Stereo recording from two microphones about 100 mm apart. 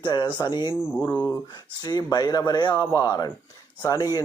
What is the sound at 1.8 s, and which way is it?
Speech, 45° left (ahead or behind).